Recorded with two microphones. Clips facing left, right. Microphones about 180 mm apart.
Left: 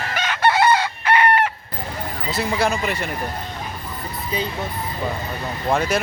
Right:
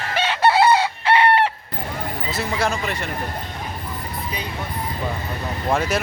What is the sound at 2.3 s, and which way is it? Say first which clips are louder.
Speech: left 3 dB; centre (ahead or behind).